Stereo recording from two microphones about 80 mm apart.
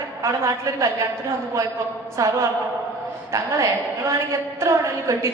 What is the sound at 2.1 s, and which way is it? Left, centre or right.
Speech, right.